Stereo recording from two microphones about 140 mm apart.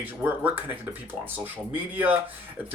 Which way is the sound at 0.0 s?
15° right (ahead or behind).